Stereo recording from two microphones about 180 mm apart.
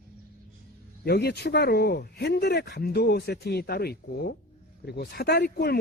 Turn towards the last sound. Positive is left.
turn(degrees=60)  # may be behind; listen again after turning